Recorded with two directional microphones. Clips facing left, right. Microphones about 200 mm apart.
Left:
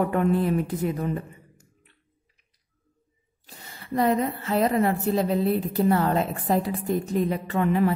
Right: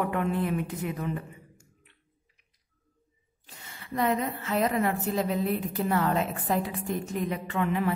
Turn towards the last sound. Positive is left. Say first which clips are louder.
# left 5 dB
turn(degrees=35)  # may be behind; listen again after turning